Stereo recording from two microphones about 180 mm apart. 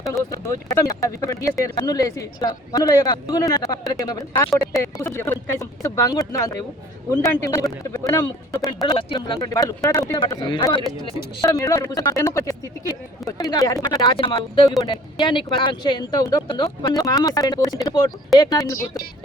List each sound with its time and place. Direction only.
0.1 s speech: 20° left (ahead or behind)